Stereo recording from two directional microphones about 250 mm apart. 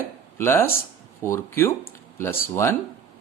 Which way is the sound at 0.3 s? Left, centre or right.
Centre.